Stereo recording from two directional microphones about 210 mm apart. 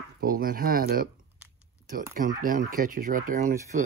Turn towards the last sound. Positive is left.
turn(degrees=-40)  # may be behind; listen again after turning